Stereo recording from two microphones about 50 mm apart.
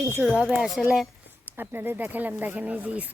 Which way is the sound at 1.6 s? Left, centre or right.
Right.